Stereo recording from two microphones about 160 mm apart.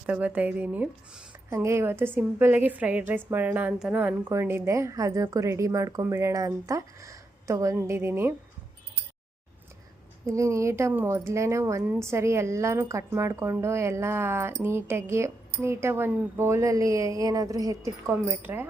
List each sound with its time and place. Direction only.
0.0 s speech: 10° right (ahead or behind)
10.2 s speech: 20° right (ahead or behind)